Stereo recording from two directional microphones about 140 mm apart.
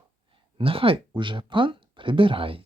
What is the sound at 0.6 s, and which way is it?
Speech, 40° right (ahead or behind).